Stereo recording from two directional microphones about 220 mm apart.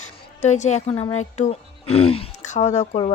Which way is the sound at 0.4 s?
30° left (ahead or behind).